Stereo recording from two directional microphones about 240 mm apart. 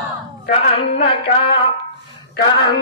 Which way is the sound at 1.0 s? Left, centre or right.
Left.